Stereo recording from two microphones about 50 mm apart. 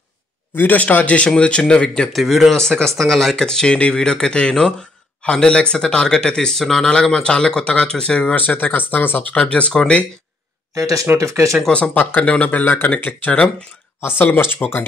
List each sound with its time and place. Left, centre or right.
0.6 s speech: left
1.2 s speech: centre
2.1 s speech: centre
2.5 s speech: centre
8.4 s speech: left
9.3 s speech: left
10.7 s speech: right
11.9 s speech: left
14.0 s speech: left